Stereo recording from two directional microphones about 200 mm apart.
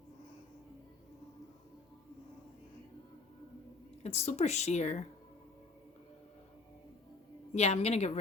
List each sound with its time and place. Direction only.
4.0 s a woman's voice: 35° left (ahead or behind)
7.5 s a woman's voice: 30° left (ahead or behind)